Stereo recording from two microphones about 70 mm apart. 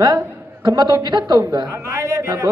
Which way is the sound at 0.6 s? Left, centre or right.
Right.